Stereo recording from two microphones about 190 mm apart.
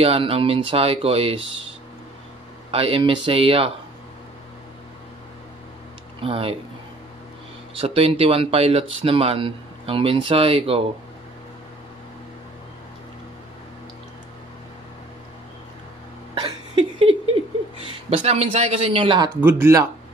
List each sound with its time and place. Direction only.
0.0 s speech: 30° right (ahead or behind)
2.7 s speech: 30° right (ahead or behind)
6.2 s speech: 30° right (ahead or behind)
7.7 s speech: 30° right (ahead or behind)
16.3 s laughter: 25° right (ahead or behind)
18.1 s speech: 35° right (ahead or behind); by 19.9 s 15° right (ahead or behind)